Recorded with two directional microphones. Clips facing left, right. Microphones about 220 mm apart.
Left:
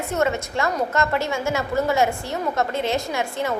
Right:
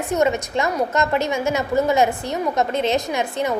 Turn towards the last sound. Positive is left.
turn(degrees=-20)  # may be behind; listen again after turning